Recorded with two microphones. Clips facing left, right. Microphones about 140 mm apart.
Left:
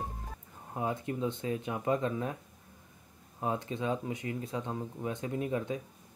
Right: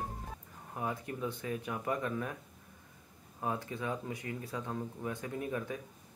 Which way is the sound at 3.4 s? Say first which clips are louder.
Left 3 dB; 20° left (ahead or behind).